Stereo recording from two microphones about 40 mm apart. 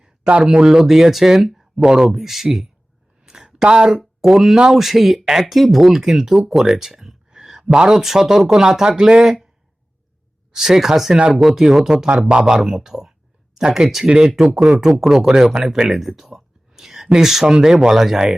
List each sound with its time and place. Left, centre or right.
0.3 s speech: right; by 1.6 s centre
1.8 s speech: centre
2.0 s speech: centre
3.2 s a sound: centre
3.9 s speech: centre
7.3 s a sound: centre
7.9 s speech: centre
9.2 s speech: centre
10.5 s speech: centre
12.0 s speech: right
13.8 s speech: centre